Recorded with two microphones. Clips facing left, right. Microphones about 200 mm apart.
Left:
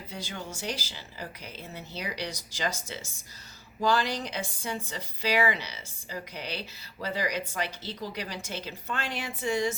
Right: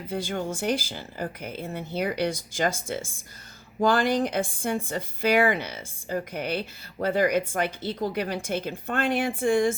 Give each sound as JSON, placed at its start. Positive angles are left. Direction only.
{"t": 0.1, "sound": "a woman's voice", "side_deg": -50}